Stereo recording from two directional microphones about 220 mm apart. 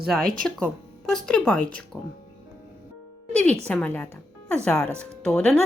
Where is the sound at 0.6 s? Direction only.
5° left (ahead or behind).